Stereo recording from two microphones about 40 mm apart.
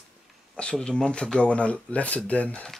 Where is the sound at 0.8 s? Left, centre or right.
Left.